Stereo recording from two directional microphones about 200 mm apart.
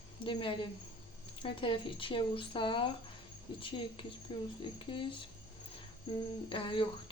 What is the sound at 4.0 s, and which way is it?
Speech, 25° left (ahead or behind).